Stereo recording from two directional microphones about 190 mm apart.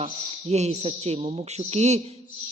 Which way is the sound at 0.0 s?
35° right (ahead or behind).